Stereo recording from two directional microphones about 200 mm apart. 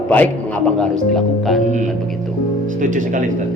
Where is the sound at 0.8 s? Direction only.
Centre (ahead or behind).